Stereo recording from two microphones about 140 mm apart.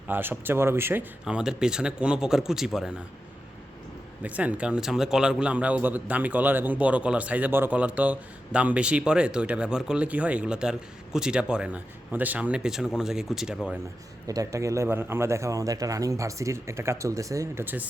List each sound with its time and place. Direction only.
0.1 s a man's voice: 15° right (ahead or behind)
1.2 s speech: 5° right (ahead or behind)
4.2 s a man's voice: 10° right (ahead or behind)
14.3 s a man's voice: 25° right (ahead or behind)